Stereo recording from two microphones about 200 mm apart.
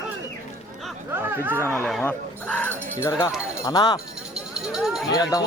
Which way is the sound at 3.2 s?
20° left (ahead or behind).